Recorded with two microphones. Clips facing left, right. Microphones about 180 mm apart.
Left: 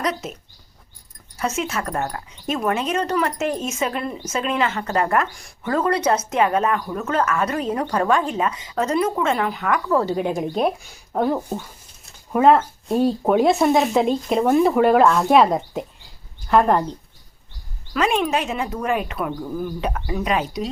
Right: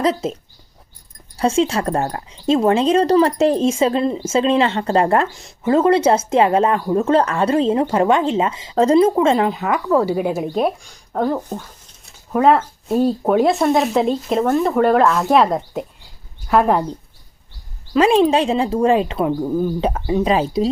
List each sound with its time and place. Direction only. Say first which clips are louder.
0.0 s speech: right 7 dB; 30° right (ahead or behind)
1.4 s speech: right 8 dB; 30° right (ahead or behind)
10.0 s speech: right 3 dB; 10° right (ahead or behind)
17.9 s speech: right 7 dB; 30° right (ahead or behind)